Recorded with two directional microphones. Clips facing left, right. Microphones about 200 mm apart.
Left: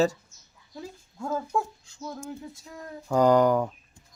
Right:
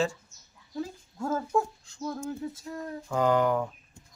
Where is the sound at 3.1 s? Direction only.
40° left (ahead or behind).